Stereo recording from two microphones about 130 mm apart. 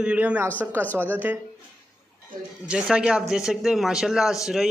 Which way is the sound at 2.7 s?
5° right (ahead or behind).